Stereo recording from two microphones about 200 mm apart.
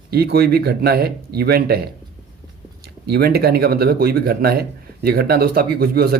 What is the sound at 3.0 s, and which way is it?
Speech, 55° right (ahead or behind).